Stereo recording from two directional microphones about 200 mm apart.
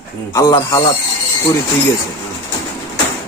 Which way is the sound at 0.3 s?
15° left (ahead or behind).